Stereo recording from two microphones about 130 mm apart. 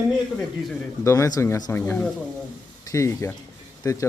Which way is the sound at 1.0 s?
25° left (ahead or behind).